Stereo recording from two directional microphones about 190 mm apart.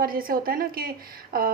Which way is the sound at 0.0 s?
50° right (ahead or behind).